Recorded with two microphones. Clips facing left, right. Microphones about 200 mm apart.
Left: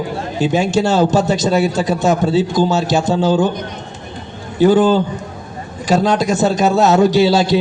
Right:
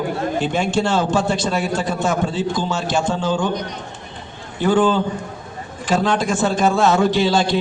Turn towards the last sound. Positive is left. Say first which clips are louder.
# left 5 dB
turn(degrees=40)  # may be behind; listen again after turning